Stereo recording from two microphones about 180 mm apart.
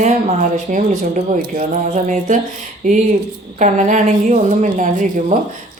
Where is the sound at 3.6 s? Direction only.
45° right (ahead or behind).